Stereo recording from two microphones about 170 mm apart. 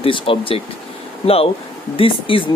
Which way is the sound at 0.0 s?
30° left (ahead or behind).